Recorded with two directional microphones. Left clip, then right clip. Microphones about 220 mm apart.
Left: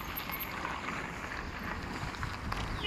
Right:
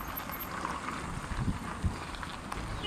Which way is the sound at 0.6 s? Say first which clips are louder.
Right 2 dB; 50° right (ahead or behind).